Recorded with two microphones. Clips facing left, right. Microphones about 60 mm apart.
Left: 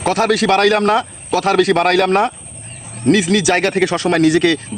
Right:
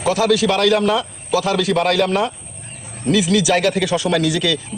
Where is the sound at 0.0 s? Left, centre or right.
Left.